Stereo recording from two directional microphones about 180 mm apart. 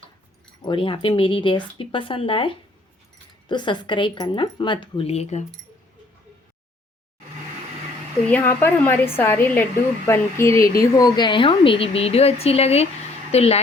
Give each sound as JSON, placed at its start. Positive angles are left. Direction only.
{"t": 0.6, "sound": "speech", "side_deg": 30}
{"t": 8.3, "sound": "a woman's voice", "side_deg": 10}